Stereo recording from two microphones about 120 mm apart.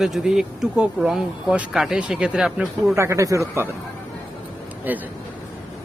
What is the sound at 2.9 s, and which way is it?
Speech, 25° right (ahead or behind).